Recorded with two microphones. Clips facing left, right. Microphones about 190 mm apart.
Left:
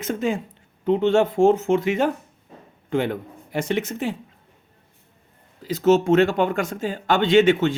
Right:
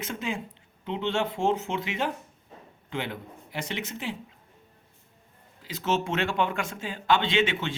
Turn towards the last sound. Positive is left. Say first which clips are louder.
# left 10 dB
turn(degrees=45)  # may be behind; listen again after turning